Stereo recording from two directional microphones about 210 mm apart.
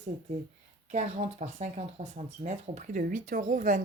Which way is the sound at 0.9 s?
30° right (ahead or behind).